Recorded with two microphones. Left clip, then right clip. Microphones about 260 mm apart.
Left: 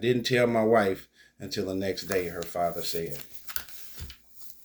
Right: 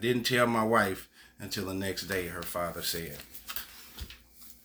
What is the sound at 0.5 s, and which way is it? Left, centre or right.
Speech, centre.